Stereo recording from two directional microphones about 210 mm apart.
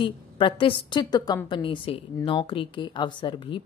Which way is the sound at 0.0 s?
25° left (ahead or behind).